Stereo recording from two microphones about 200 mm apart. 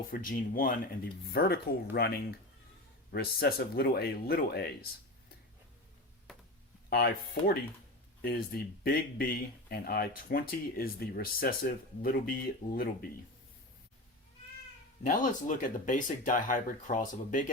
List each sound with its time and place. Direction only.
0.1 s speech: 45° left (ahead or behind)
6.3 s a sound: centre (ahead or behind)
6.9 s speech: 50° left (ahead or behind)
15.0 s speech: 40° left (ahead or behind)